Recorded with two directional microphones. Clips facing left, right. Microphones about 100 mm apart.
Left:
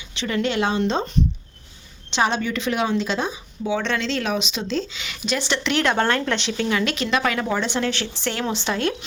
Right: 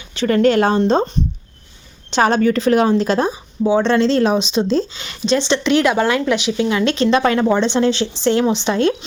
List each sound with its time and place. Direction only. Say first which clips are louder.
0.1 s speech: right 10 dB; 45° right (ahead or behind); by 9.0 s 25° right (ahead or behind)